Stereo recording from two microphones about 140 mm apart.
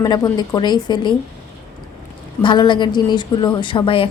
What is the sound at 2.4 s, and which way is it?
A woman's voice, 35° left (ahead or behind).